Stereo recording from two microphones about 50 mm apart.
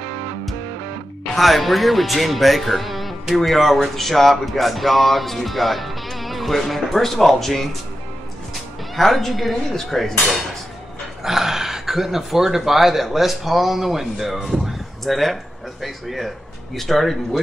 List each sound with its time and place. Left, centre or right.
1.3 s speech: centre
8.9 s speech: centre
11.2 s speech: centre
14.5 s a sound: centre
15.8 s speech: centre